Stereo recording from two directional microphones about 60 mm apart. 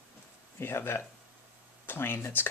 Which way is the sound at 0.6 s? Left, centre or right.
Left.